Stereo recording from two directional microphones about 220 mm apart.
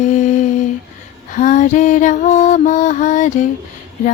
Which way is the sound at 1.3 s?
35° left (ahead or behind).